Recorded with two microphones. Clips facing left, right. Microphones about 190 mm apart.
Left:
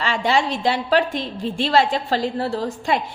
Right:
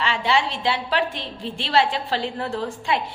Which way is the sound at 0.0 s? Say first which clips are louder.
Left 2 dB; 45° left (ahead or behind).